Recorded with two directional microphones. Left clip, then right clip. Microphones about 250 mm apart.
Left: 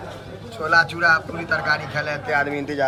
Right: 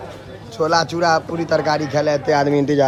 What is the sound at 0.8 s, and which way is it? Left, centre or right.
Speech, centre.